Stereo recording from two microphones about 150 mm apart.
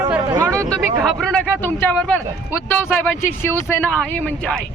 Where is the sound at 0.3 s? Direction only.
20° right (ahead or behind).